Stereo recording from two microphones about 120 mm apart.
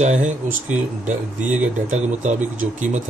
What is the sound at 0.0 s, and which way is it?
Speech, 80° right.